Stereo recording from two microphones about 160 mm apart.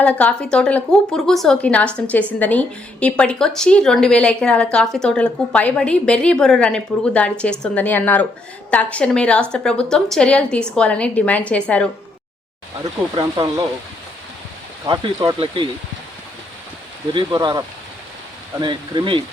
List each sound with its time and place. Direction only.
0.0 s a woman's voice: 10° left (ahead or behind)
13.1 s speech: 25° right (ahead or behind)
14.8 s speech: 20° right (ahead or behind)
17.2 s speech: 25° right (ahead or behind)